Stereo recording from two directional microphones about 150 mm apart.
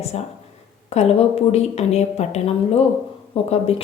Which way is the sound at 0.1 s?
45° left (ahead or behind).